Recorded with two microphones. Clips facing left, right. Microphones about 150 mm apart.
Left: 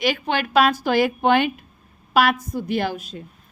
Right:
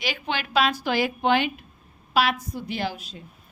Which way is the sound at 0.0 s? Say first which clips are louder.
Left 7 dB; 50° left (ahead or behind).